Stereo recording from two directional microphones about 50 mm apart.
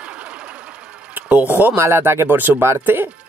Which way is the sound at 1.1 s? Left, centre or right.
Right.